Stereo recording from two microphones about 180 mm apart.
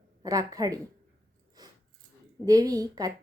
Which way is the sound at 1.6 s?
20° right (ahead or behind).